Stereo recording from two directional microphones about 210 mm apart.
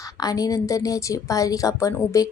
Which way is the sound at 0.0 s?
15° left (ahead or behind).